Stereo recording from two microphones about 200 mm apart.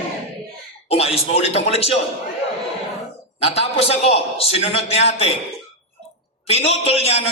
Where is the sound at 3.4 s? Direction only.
30° left (ahead or behind).